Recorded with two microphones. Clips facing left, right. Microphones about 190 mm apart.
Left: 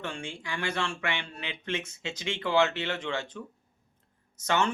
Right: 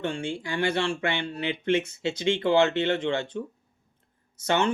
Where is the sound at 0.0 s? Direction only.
30° right (ahead or behind).